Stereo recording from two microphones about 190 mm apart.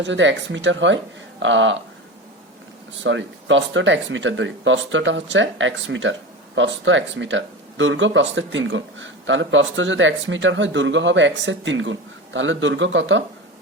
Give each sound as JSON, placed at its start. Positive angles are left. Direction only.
{"t": 0.0, "sound": "speech", "side_deg": -70}
{"t": 3.0, "sound": "speech", "side_deg": -80}